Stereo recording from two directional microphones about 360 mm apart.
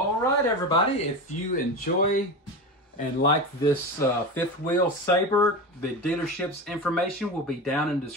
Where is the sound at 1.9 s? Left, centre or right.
Left.